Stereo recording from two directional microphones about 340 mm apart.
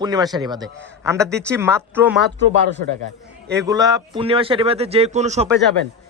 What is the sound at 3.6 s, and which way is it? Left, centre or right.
Speech, centre.